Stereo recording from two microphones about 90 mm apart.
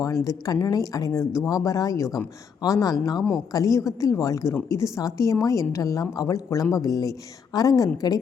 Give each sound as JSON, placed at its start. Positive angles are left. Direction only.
{"t": 0.3, "sound": "a woman's voice", "side_deg": 40}